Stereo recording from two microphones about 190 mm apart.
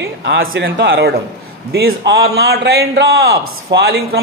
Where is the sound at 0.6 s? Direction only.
60° right (ahead or behind).